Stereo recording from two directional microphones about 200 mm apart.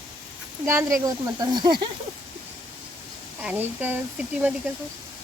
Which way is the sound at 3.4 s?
10° right (ahead or behind).